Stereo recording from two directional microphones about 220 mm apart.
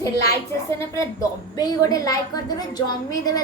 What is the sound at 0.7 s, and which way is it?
A woman's voice, 15° left (ahead or behind).